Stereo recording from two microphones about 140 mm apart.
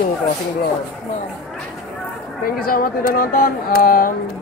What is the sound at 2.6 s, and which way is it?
Speech, 90° left.